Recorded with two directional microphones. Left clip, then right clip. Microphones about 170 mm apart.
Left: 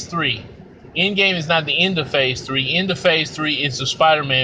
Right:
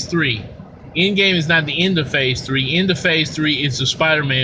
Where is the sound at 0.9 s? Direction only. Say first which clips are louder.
Right 1 dB; 10° right (ahead or behind).